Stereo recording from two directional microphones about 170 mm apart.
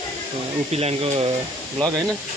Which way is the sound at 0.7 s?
40° right (ahead or behind).